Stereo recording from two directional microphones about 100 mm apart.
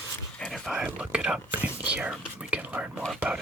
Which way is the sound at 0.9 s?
10° right (ahead or behind).